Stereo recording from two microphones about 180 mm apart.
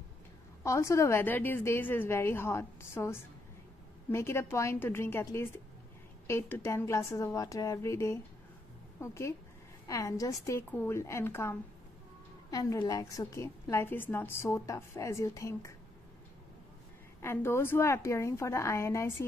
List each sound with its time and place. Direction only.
0.7 s a woman's voice: 15° left (ahead or behind)
17.2 s a woman's voice: 15° left (ahead or behind)